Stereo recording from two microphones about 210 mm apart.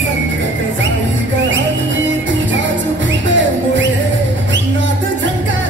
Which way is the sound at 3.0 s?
60° right (ahead or behind).